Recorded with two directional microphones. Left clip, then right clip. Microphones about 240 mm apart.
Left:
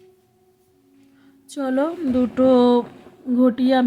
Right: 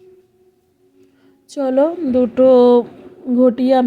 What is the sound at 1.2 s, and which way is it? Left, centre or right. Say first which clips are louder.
Speech: right 6 dB; centre.